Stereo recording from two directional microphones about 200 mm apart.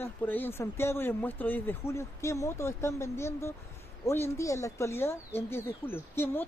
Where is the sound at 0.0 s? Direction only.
10° left (ahead or behind).